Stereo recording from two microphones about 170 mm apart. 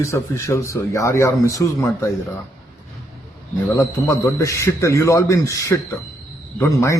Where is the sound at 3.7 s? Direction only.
15° left (ahead or behind).